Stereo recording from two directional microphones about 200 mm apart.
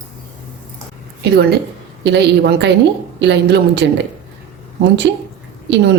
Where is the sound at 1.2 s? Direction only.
55° right (ahead or behind).